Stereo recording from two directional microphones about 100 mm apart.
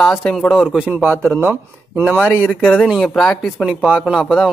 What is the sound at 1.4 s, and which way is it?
Speech, 20° right (ahead or behind).